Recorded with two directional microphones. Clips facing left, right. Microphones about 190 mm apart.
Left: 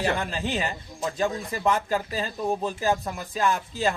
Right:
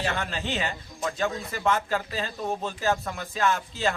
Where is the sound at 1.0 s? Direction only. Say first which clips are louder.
Left 2 dB; 10° left (ahead or behind).